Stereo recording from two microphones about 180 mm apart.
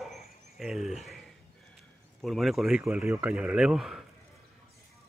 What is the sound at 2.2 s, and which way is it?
Speech, centre (ahead or behind).